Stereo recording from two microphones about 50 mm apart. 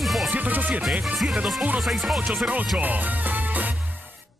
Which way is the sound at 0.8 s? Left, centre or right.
Centre.